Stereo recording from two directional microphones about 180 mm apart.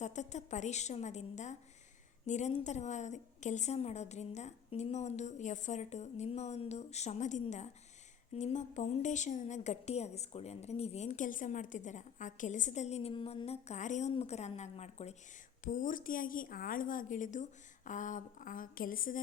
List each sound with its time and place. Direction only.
0.0 s a woman's voice: 40° left (ahead or behind)